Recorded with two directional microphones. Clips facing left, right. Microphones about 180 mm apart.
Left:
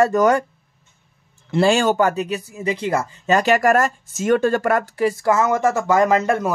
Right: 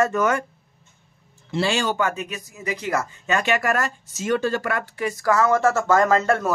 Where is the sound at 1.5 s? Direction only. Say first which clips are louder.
Left 7 dB; 50° left (ahead or behind).